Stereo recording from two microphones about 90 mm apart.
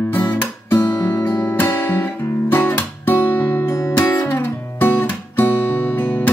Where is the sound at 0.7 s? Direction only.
35° left (ahead or behind).